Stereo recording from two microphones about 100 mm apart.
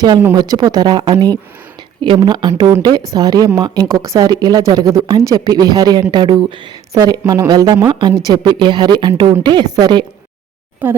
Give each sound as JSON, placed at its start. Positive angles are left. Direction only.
{"t": 0.3, "sound": "speech", "side_deg": -40}
{"t": 10.8, "sound": "a woman's voice", "side_deg": -20}